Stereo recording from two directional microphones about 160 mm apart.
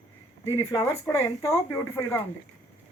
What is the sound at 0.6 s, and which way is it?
Speech, 20° left (ahead or behind).